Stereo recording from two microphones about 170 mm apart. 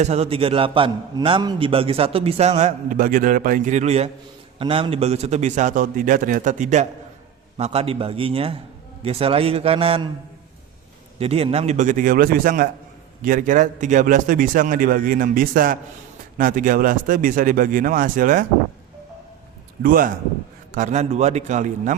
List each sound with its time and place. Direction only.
0.0 s a man's voice: 40° right (ahead or behind)
11.2 s a man's voice: 35° right (ahead or behind); by 18.4 s 50° right (ahead or behind)
19.8 s speech: 55° right (ahead or behind)
20.7 s a man's voice: 45° right (ahead or behind)